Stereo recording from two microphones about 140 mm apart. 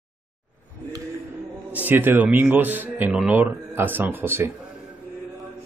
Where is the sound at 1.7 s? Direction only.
10° right (ahead or behind).